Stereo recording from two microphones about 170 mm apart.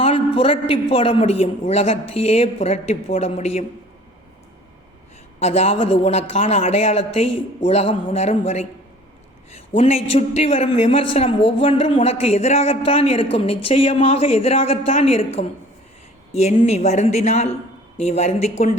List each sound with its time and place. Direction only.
0.0 s a man's voice: 35° left (ahead or behind)
5.4 s a man's voice: 40° left (ahead or behind)